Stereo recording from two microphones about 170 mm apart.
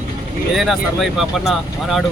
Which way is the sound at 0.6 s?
Centre (ahead or behind).